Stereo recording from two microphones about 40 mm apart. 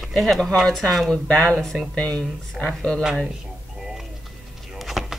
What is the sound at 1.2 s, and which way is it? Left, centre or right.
Speech, left.